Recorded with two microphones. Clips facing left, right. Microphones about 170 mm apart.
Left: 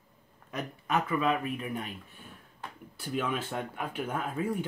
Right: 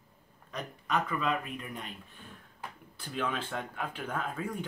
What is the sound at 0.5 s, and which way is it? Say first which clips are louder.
Speech: left 2 dB; 10° left (ahead or behind).